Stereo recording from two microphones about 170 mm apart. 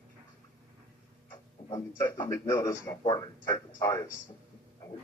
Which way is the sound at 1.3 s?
15° left (ahead or behind).